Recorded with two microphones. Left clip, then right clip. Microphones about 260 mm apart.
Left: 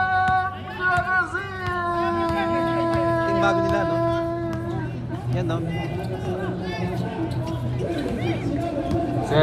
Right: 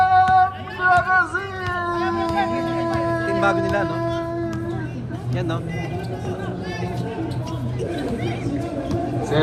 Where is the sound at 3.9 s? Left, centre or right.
Left.